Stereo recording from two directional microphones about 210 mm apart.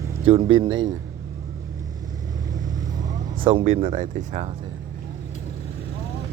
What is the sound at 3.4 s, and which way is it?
Speech, 25° right (ahead or behind).